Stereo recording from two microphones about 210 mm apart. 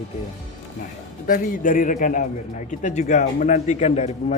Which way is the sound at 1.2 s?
40° left (ahead or behind).